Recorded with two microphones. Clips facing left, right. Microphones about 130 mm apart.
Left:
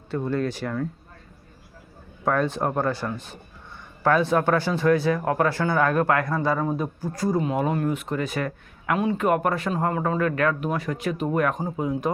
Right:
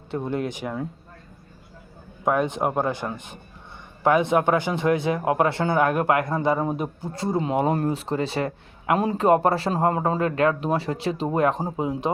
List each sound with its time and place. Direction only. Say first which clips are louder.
0.1 s speech: left 1 dB; 20° right (ahead or behind)
2.2 s speech: right 1 dB; 15° right (ahead or behind)